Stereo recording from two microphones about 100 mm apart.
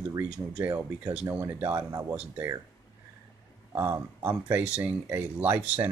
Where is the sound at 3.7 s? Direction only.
25° right (ahead or behind).